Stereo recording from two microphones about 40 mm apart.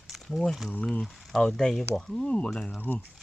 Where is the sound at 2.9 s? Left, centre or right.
Left.